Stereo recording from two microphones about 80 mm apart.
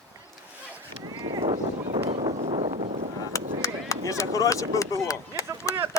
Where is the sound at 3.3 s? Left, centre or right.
Left.